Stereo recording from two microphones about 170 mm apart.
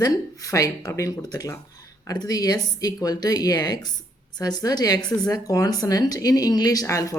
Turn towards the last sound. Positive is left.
turn(degrees=20)  # may be behind; listen again after turning